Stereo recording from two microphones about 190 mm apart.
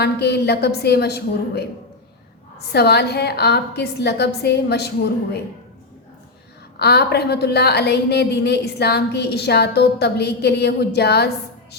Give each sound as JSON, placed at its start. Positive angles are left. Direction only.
{"t": 0.0, "sound": "a woman's voice", "side_deg": 60}
{"t": 6.7, "sound": "a woman's voice", "side_deg": 60}